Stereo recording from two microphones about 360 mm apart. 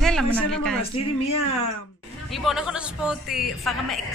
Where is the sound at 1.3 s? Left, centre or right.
Left.